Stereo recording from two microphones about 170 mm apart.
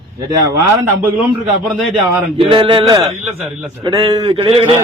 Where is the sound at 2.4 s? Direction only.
30° right (ahead or behind).